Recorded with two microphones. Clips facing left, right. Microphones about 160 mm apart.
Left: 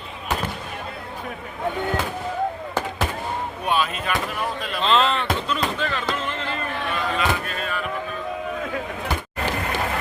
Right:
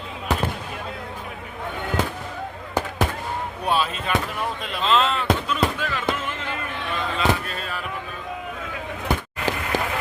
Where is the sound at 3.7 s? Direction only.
30° right (ahead or behind).